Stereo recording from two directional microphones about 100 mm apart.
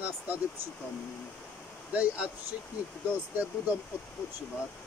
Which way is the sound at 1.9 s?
15° right (ahead or behind).